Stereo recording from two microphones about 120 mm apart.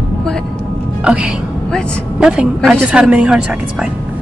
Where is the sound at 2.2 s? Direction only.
5° right (ahead or behind).